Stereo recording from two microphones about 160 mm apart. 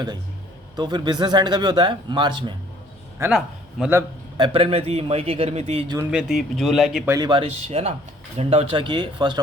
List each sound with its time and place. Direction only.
0.8 s speech: 30° right (ahead or behind)
3.2 s a man's voice: 15° right (ahead or behind)
3.8 s speech: centre (ahead or behind)
4.4 s a man's voice: 30° right (ahead or behind)
6.1 s speech: 5° right (ahead or behind)
7.1 s a man's voice: 25° right (ahead or behind)